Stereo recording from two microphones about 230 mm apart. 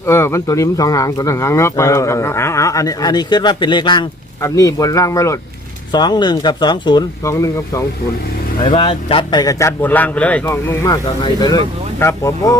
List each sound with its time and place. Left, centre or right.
0.0 s speech: centre